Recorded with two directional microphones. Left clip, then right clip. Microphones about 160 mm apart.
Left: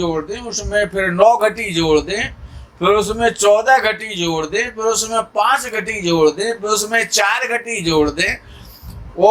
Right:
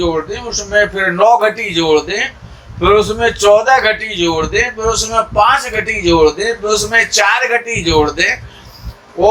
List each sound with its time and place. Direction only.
0.0 s a man's voice: 50° left (ahead or behind)